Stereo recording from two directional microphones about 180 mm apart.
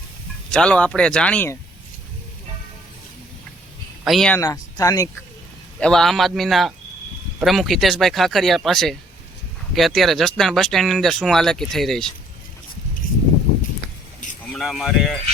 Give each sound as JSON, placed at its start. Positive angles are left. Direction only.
{"t": 0.5, "sound": "speech", "side_deg": 5}
{"t": 4.0, "sound": "speech", "side_deg": 0}
{"t": 4.4, "sound": "speech", "side_deg": 15}
{"t": 5.8, "sound": "speech", "side_deg": 5}
{"t": 14.4, "sound": "speech", "side_deg": 5}